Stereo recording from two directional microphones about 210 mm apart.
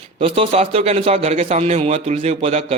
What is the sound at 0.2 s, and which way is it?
A man's voice, 30° right (ahead or behind).